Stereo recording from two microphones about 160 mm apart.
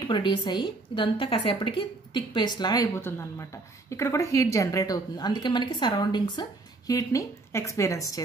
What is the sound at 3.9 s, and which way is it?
A woman's voice, 20° left (ahead or behind).